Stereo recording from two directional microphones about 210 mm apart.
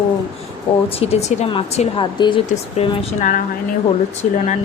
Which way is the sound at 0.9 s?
30° left (ahead or behind).